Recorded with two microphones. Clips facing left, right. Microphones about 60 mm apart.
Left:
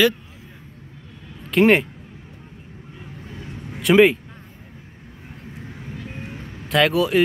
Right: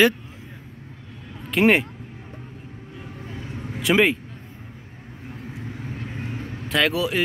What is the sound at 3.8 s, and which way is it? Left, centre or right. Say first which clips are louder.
Speech: left 5 dB; centre.